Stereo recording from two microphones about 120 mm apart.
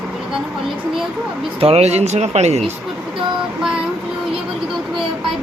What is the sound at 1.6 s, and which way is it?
Speech, 60° right (ahead or behind).